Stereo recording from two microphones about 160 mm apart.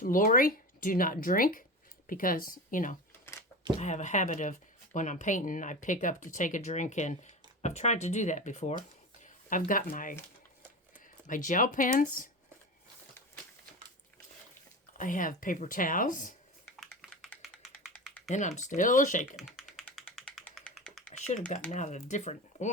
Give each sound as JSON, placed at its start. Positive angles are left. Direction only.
{"t": 0.0, "sound": "speech", "side_deg": 60}
{"t": 9.2, "sound": "a sound", "side_deg": 55}
{"t": 9.9, "sound": "speech", "side_deg": 55}
{"t": 11.3, "sound": "speech", "side_deg": 55}
{"t": 14.9, "sound": "speech", "side_deg": 55}
{"t": 16.7, "sound": "typing", "side_deg": 0}
{"t": 18.3, "sound": "speech", "side_deg": 50}
{"t": 19.4, "sound": "typing", "side_deg": 0}
{"t": 20.6, "sound": "computer keyboard", "side_deg": 0}
{"t": 21.7, "sound": "speech", "side_deg": 45}